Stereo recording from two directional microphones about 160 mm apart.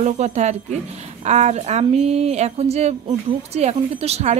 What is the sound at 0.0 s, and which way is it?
A woman's voice, 45° right (ahead or behind).